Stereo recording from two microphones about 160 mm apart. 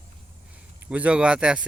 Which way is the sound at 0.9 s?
10° right (ahead or behind).